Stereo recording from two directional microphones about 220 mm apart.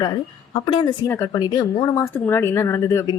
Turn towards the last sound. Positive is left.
turn(degrees=15)  # may be behind; listen again after turning